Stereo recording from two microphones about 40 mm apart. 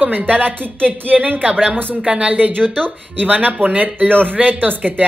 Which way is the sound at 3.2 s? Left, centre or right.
Right.